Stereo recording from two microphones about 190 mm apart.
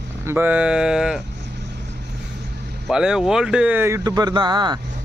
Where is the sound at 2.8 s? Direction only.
5° right (ahead or behind).